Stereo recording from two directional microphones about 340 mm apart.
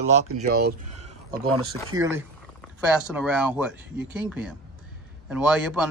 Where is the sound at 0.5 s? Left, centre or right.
Right.